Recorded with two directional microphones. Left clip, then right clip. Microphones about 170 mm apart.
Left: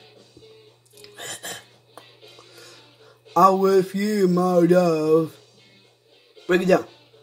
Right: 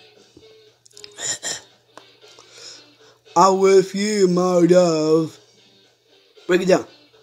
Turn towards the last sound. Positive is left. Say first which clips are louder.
# right 2 dB
turn(degrees=-20)  # may be behind; listen again after turning